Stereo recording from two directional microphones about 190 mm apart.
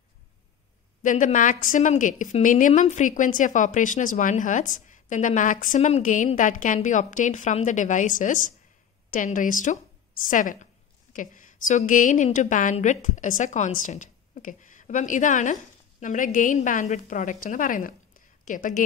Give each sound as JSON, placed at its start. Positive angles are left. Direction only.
{"t": 1.0, "sound": "a woman's voice", "side_deg": 45}